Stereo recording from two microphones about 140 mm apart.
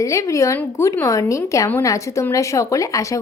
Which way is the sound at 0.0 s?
20° left (ahead or behind).